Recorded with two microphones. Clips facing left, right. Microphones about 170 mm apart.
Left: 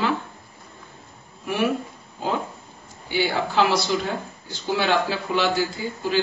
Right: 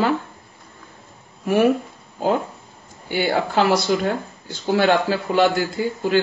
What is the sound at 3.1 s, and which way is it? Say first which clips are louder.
Speech: right 3 dB; 50° right (ahead or behind).